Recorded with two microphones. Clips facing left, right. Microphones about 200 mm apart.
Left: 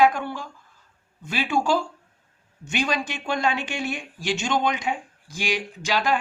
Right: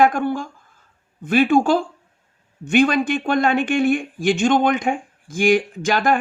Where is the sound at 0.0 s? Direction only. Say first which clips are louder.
Right 3 dB; 50° right (ahead or behind).